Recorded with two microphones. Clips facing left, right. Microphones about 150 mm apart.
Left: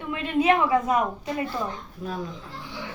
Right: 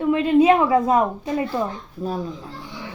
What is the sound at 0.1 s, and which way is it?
Speech, 30° right (ahead or behind).